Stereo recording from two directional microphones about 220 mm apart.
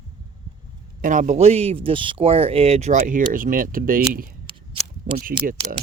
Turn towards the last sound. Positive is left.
turn(degrees=-40)  # may be behind; listen again after turning